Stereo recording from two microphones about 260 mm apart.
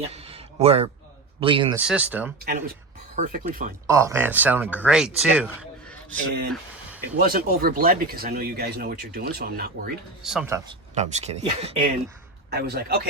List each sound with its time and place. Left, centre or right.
0.0 s a sound: right
1.4 s speech: centre
1.7 s speech: centre
3.2 s speech: right
3.8 s speech: centre
6.2 s speech: right
10.2 s speech: centre
10.9 s speech: right
12.5 s speech: right